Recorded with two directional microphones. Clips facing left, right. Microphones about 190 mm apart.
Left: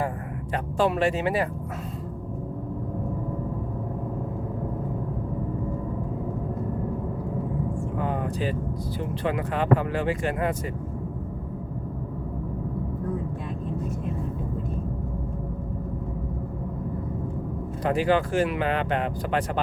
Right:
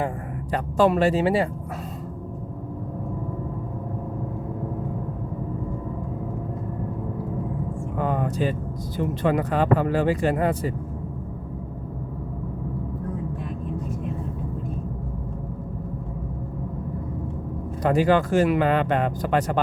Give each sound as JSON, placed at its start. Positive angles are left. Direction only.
{"t": 0.5, "sound": "speech", "side_deg": -40}
{"t": 7.9, "sound": "vehicle", "side_deg": -45}
{"t": 9.2, "sound": "speech", "side_deg": -40}
{"t": 17.8, "sound": "speech", "side_deg": -40}